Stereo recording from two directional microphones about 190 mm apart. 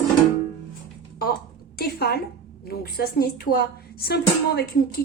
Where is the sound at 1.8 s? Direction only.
55° left (ahead or behind).